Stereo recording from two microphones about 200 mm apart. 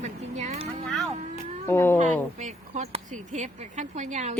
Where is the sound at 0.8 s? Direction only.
Centre (ahead or behind).